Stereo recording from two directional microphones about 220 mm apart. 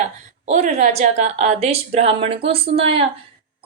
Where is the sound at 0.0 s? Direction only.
30° right (ahead or behind).